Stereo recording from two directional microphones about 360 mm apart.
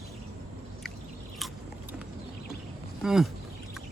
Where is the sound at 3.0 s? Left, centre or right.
Centre.